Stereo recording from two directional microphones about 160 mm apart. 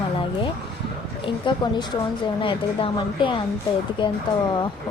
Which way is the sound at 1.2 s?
30° left (ahead or behind).